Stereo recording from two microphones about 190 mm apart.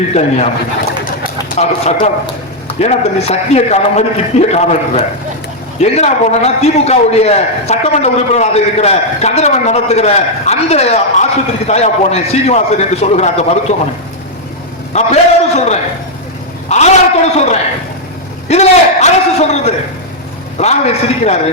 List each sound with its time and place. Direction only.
0.1 s a man's voice: 35° left (ahead or behind)
1.5 s a man's voice: 35° left (ahead or behind)
14.9 s a man's voice: 35° left (ahead or behind)